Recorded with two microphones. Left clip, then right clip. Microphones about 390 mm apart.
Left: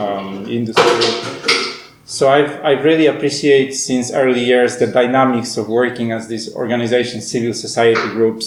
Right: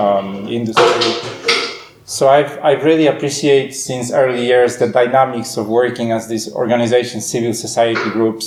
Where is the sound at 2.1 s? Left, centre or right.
Right.